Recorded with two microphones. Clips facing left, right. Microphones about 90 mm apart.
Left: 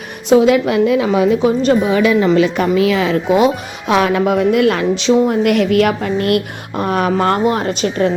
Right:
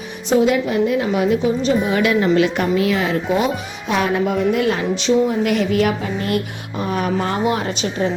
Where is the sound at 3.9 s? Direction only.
90° left; by 7.4 s 70° left (ahead or behind).